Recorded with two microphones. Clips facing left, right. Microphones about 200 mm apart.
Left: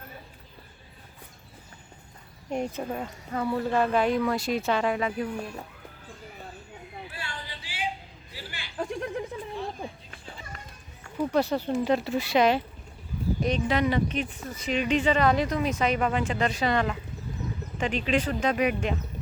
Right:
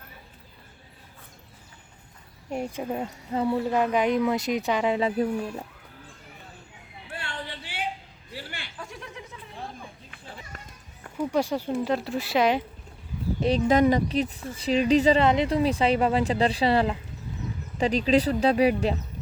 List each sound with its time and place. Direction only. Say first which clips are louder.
2.5 s speech: left 1 dB; 5° right (ahead or behind)
2.9 s speech: right 3 dB; 20° right (ahead or behind)
4.9 s speech: right 4 dB; 30° right (ahead or behind)
7.1 s a sound: right 3 dB; 60° right (ahead or behind)
8.8 s a sound: left 12 dB; 55° left (ahead or behind)
10.5 s run: even; 50° right (ahead or behind)
11.3 s speech: even; 10° right (ahead or behind)
11.7 s speech: left 1 dB; centre (ahead or behind)
13.7 s speech: right 7 dB; 45° right (ahead or behind)
15.2 s speech: right 2 dB; 25° right (ahead or behind)